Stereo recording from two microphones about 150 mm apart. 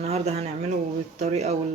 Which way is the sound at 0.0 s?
45° right (ahead or behind).